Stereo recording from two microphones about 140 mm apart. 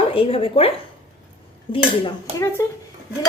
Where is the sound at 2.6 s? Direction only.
20° left (ahead or behind).